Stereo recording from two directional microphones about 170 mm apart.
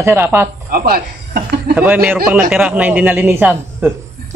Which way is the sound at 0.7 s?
65° right (ahead or behind).